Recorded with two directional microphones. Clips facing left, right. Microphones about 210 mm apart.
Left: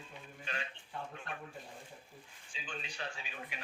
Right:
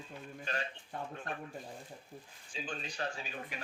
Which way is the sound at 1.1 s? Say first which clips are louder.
Right 4 dB; 40° right (ahead or behind).